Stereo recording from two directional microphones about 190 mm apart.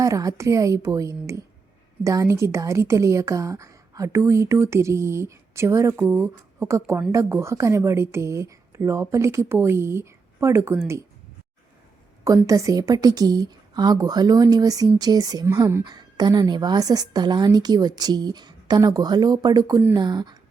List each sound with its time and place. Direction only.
0.0 s speech: 20° right (ahead or behind)
12.2 s a woman's voice: 15° right (ahead or behind)